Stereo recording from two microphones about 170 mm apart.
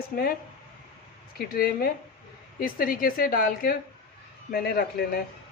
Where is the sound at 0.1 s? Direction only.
60° left (ahead or behind).